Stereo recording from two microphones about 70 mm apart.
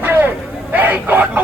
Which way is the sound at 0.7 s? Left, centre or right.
Right.